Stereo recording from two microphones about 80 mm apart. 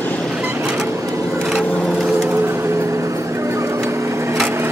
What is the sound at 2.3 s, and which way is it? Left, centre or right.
Vehicle, right.